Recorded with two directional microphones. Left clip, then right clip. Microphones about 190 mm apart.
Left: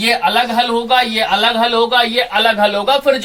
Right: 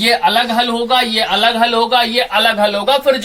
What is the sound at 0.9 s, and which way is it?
Speech, 15° left (ahead or behind).